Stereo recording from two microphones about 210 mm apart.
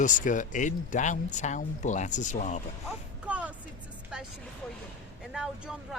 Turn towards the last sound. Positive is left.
turn(degrees=-5)  # may be behind; listen again after turning